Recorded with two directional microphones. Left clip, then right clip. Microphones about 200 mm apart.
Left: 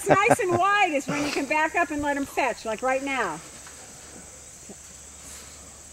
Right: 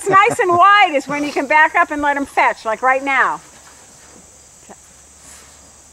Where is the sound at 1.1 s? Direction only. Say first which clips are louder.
Right 7 dB; centre (ahead or behind).